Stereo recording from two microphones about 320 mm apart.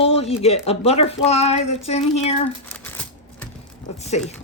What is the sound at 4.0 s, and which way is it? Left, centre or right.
Speech, left.